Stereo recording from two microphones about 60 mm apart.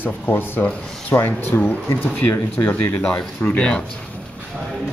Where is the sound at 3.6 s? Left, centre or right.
Centre.